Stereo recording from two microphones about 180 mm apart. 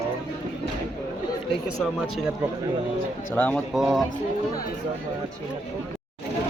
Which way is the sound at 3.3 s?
5° left (ahead or behind).